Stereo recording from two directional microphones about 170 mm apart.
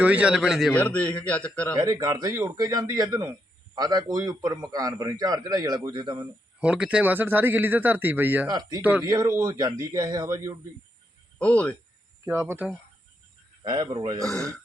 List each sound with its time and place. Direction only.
0.0 s a man's voice: 10° right (ahead or behind)
0.7 s a man's voice: 10° left (ahead or behind)
1.7 s a man's voice: 20° right (ahead or behind)
6.6 s speech: 5° right (ahead or behind)
8.4 s a man's voice: 25° right (ahead or behind)
11.3 s speech: 10° left (ahead or behind)
12.2 s speech: 15° right (ahead or behind)
13.7 s a man's voice: 25° right (ahead or behind)
14.3 s a man's voice: 5° left (ahead or behind)